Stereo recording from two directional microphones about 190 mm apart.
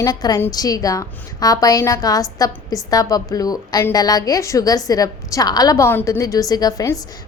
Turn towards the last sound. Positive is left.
turn(degrees=20)  # may be behind; listen again after turning